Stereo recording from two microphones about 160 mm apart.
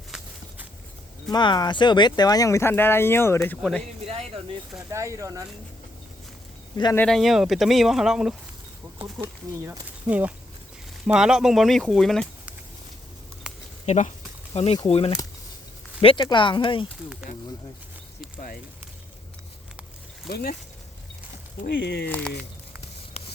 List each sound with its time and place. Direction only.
0.1 s walk: 5° right (ahead or behind)
1.3 s speech: 25° left (ahead or behind); by 3.8 s 5° left (ahead or behind)
4.0 s a sound: 40° right (ahead or behind)
4.9 s speech: 20° right (ahead or behind)
6.9 s speech: 5° left (ahead or behind)
10.1 s speech: 10° right (ahead or behind)
13.8 s speech: 45° left (ahead or behind)
17.3 s speech: 45° left (ahead or behind)
18.3 s speech: 65° left (ahead or behind)
20.2 s speech: 70° left (ahead or behind)
21.6 s speech: 75° left (ahead or behind)
23.2 s a sound: 40° left (ahead or behind)